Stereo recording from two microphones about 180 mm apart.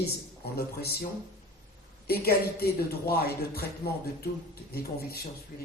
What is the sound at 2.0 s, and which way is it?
A man's voice, 60° left (ahead or behind).